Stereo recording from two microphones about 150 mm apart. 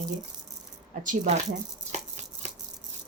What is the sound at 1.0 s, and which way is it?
Speech, 60° right (ahead or behind).